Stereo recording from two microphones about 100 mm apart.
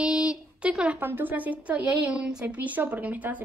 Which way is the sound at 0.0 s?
10° right (ahead or behind).